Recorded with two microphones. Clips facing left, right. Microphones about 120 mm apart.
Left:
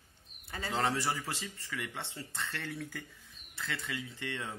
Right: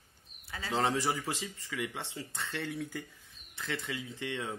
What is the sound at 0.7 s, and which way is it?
Speech, 15° right (ahead or behind).